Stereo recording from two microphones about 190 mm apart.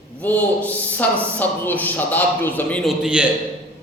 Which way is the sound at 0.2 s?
10° left (ahead or behind).